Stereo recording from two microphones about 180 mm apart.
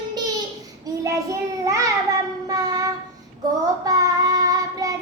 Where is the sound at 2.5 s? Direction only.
20° right (ahead or behind).